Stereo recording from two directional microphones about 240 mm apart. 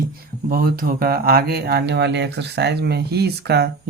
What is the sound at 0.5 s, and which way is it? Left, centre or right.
Speech, right.